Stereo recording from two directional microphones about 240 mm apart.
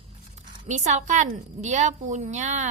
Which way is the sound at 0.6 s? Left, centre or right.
Right.